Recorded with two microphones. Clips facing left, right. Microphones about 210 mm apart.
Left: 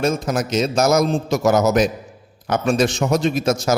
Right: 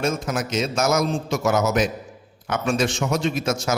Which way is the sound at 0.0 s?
35° left (ahead or behind).